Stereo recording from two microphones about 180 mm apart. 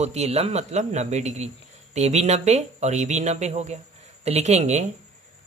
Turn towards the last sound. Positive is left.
turn(degrees=-40)  # may be behind; listen again after turning